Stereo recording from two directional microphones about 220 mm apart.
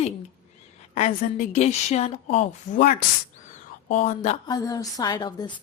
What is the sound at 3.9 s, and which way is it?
Speech, 30° left (ahead or behind).